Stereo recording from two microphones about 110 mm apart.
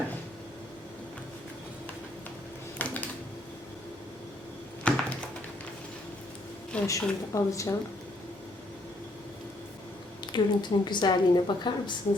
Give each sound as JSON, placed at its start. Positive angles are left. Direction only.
{"t": 2.7, "sound": "typing", "side_deg": 15}
{"t": 4.8, "sound": "a sound", "side_deg": 10}
{"t": 6.8, "sound": "speech", "side_deg": 30}
{"t": 10.3, "sound": "a woman's voice", "side_deg": 45}